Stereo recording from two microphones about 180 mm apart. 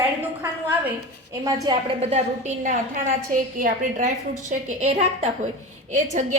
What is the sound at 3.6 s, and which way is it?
A woman's voice, 45° right (ahead or behind).